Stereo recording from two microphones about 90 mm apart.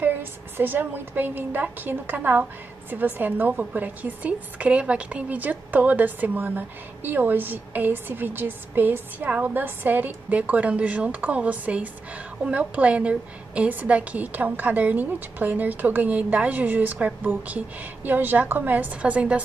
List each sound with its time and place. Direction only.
0.0 s a woman's voice: 25° right (ahead or behind)